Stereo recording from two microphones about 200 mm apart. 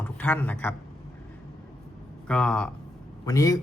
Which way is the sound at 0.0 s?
10° left (ahead or behind).